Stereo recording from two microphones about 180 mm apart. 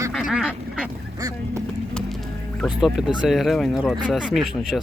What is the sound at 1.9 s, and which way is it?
Music, 5° left (ahead or behind).